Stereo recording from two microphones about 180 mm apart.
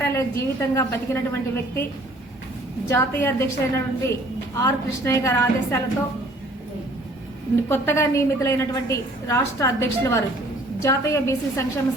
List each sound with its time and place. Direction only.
0.0 s a woman's voice: 15° left (ahead or behind)
2.8 s a woman's voice: 15° left (ahead or behind)
7.7 s a woman's voice: 15° left (ahead or behind)